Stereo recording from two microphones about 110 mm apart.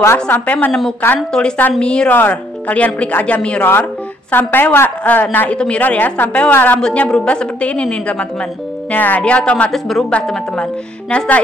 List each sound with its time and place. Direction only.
0.0 s a woman's voice: 20° left (ahead or behind)